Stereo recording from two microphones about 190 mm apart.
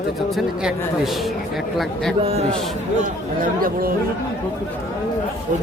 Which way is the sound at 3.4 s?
50° right (ahead or behind).